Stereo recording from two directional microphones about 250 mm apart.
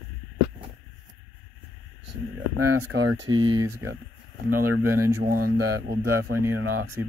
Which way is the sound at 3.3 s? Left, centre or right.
Centre.